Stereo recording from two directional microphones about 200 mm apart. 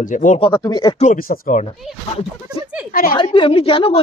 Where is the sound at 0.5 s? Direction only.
20° left (ahead or behind).